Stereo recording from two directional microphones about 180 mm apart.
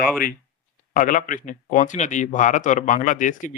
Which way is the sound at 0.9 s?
45° left (ahead or behind).